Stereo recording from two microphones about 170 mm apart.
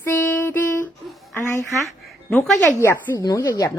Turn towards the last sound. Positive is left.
turn(degrees=20)  # may be behind; listen again after turning